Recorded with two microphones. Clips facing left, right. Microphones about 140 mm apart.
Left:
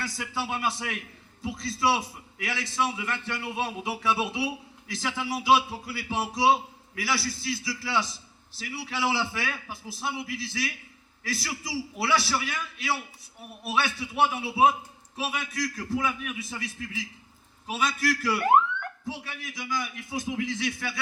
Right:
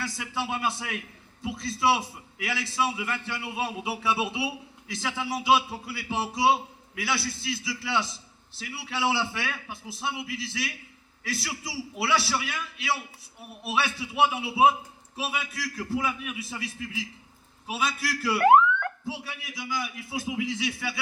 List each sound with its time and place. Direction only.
0.2 s a man's voice: centre (ahead or behind)
18.3 s a sound: 75° right (ahead or behind)
19.0 s a man's voice: 5° right (ahead or behind)